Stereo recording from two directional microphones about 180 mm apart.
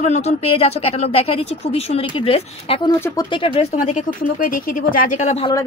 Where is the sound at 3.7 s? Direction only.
40° left (ahead or behind).